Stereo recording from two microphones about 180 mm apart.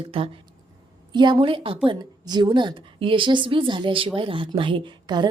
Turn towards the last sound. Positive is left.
turn(degrees=-25)  # may be behind; listen again after turning